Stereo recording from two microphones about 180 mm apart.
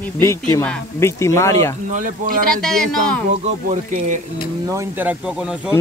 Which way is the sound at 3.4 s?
40° right (ahead or behind).